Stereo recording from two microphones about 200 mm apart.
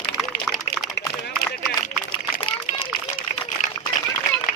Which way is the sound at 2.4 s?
25° left (ahead or behind).